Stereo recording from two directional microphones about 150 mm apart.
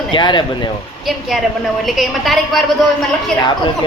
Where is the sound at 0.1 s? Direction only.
30° left (ahead or behind).